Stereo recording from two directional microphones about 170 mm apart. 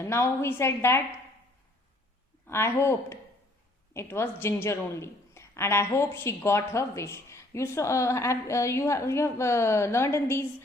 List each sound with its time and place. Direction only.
0.0 s a woman's voice: 15° left (ahead or behind)
2.5 s a woman's voice: 15° left (ahead or behind)